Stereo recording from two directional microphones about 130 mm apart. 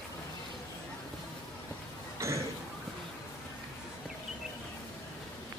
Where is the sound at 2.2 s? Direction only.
20° right (ahead or behind).